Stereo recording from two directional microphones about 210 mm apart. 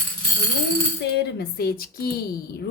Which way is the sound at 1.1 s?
50° left (ahead or behind).